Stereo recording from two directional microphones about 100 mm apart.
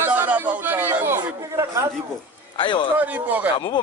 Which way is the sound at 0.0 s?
20° right (ahead or behind).